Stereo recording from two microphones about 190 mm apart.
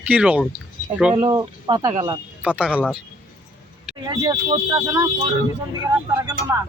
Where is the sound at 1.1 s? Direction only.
20° right (ahead or behind).